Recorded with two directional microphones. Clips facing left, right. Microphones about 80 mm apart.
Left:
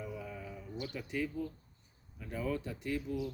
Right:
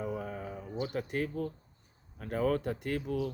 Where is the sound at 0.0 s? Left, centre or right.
Right.